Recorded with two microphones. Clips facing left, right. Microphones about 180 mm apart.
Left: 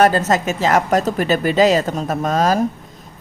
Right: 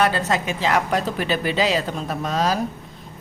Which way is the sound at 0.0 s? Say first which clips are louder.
Left 6 dB; 45° left (ahead or behind).